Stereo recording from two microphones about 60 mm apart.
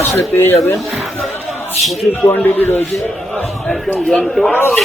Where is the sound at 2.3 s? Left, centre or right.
Left.